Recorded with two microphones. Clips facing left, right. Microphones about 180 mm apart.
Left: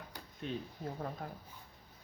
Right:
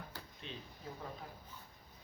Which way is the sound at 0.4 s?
50° left (ahead or behind).